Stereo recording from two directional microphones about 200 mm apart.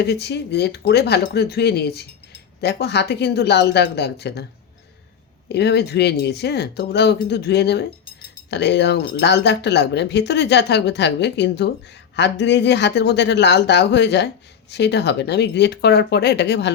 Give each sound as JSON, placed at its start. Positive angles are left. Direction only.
{"t": 0.0, "sound": "speech", "side_deg": 55}
{"t": 5.5, "sound": "speech", "side_deg": 55}